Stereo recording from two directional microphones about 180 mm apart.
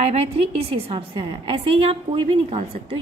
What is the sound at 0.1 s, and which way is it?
A woman's voice, 35° right (ahead or behind).